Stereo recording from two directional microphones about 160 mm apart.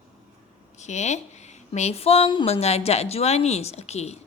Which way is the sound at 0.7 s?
45° left (ahead or behind).